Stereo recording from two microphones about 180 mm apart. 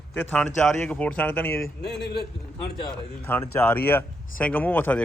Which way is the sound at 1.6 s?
70° left (ahead or behind).